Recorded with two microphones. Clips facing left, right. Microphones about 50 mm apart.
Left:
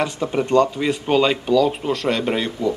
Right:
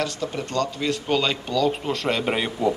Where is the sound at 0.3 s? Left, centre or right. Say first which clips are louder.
Left 9 dB; left; by 2.5 s centre.